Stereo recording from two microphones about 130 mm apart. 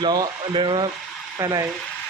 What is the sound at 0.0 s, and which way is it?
Speech, 30° right (ahead or behind).